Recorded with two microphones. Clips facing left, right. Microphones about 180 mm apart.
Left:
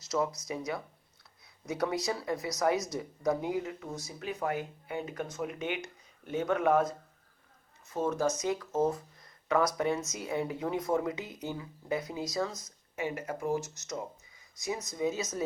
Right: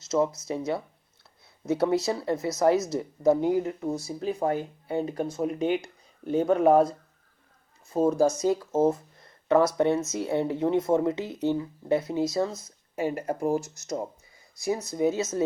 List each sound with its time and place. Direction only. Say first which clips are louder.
0.0 s a woman's voice: right 6 dB; 25° right (ahead or behind)
7.9 s a woman's voice: right 8 dB; 30° right (ahead or behind)